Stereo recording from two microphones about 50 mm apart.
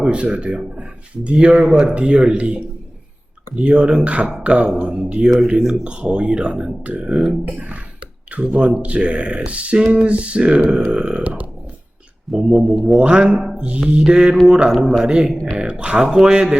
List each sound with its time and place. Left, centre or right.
0.0 s a man's voice: right
12.3 s speech: centre
12.9 s a man's voice: right